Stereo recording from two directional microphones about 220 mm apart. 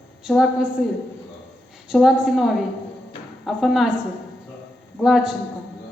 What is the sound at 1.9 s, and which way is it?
A woman's voice, centre (ahead or behind).